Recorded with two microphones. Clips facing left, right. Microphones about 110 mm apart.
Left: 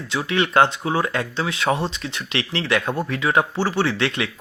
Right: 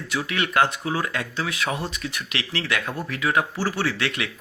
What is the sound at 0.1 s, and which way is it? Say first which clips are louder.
Speech: left 5 dB; 25° left (ahead or behind).